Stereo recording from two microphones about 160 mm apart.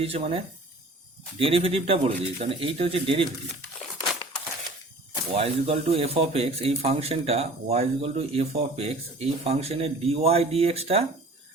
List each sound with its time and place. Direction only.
0.0 s a man's voice: 40° right (ahead or behind)
5.3 s a man's voice: 40° right (ahead or behind)